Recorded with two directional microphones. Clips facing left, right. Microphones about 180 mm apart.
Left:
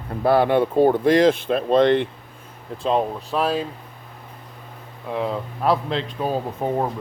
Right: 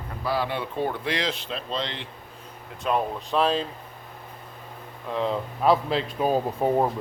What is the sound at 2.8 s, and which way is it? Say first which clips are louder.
Speech: left 4 dB; 25° left (ahead or behind).